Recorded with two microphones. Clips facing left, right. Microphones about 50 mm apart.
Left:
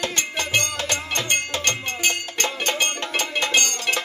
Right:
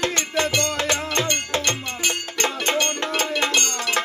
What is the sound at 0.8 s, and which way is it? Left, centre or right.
Music, right.